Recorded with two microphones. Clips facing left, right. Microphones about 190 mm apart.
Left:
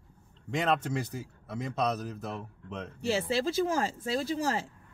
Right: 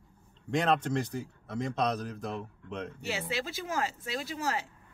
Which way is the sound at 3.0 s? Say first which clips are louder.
Left 8 dB; 30° left (ahead or behind).